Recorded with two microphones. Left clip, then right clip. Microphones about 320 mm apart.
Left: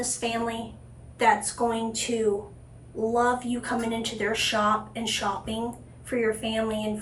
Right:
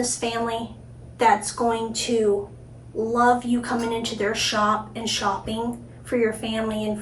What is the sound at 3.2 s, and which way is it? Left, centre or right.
A woman's voice, centre.